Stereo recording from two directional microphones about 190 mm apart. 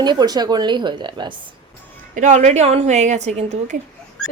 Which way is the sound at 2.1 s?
40° right (ahead or behind).